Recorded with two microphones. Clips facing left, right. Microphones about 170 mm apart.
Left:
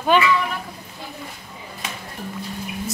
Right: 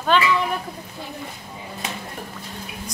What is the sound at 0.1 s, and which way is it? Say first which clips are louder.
Speech: left 2 dB; 10° left (ahead or behind).